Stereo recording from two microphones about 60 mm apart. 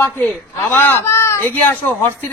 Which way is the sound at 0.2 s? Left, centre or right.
Left.